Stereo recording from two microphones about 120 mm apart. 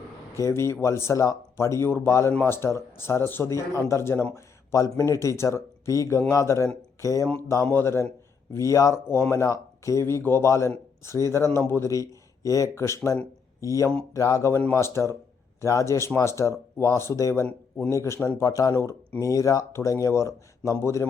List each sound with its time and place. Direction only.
0.3 s speech: 25° left (ahead or behind)